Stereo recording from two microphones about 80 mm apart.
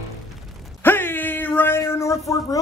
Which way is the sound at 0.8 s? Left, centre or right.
Left.